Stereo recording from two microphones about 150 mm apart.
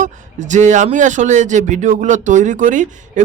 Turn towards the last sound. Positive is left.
turn(degrees=-55)  # may be behind; listen again after turning